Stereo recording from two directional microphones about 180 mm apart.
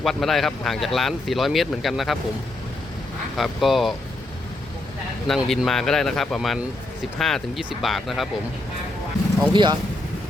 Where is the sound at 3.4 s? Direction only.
Centre (ahead or behind).